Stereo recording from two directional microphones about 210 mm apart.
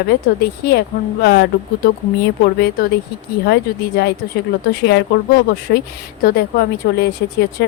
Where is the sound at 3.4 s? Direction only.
50° left (ahead or behind).